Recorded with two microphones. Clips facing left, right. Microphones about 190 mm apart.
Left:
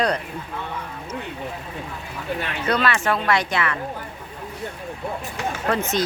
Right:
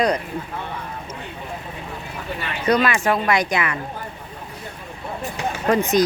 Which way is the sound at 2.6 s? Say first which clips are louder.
Right 4 dB; 15° right (ahead or behind).